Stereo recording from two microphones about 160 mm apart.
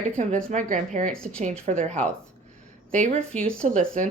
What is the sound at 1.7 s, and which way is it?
Speech, 50° right (ahead or behind).